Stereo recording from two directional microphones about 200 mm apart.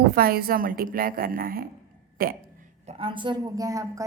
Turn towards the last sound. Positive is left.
turn(degrees=-15)  # may be behind; listen again after turning